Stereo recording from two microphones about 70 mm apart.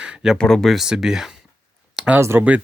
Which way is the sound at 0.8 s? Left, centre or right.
Centre.